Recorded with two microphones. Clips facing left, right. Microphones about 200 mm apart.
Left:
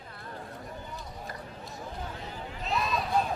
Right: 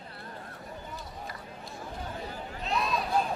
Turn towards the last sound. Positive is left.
turn(degrees=0)  # may be behind; listen again after turning